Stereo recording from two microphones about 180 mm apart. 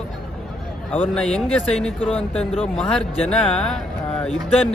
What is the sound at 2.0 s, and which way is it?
Speech, 30° left (ahead or behind).